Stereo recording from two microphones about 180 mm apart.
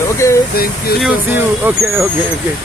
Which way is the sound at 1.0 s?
10° right (ahead or behind).